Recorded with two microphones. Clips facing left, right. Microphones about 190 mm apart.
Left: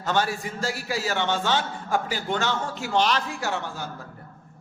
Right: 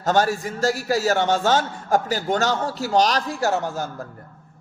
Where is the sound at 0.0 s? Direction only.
45° right (ahead or behind).